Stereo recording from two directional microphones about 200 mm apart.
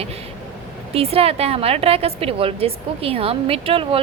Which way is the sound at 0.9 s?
30° right (ahead or behind).